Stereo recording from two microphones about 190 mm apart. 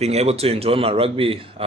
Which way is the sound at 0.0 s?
35° right (ahead or behind).